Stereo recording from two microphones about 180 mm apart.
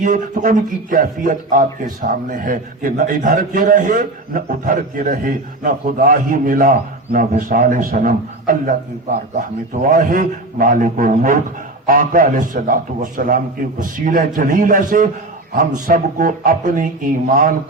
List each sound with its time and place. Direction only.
0.0 s a man's voice: 50° right (ahead or behind)
9.8 s a man's voice: 50° right (ahead or behind)